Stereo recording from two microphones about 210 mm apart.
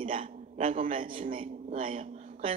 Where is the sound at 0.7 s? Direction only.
25° right (ahead or behind).